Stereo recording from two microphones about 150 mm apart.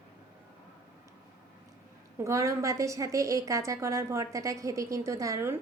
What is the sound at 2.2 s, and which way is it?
A woman's voice, 20° right (ahead or behind).